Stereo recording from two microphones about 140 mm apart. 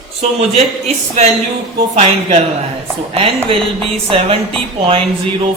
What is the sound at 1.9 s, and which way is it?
Speech, 45° right (ahead or behind).